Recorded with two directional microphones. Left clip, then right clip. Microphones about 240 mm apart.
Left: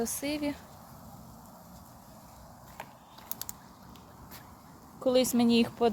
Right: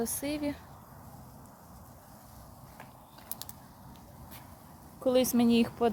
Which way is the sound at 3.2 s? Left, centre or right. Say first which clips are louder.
Left 3 dB; centre.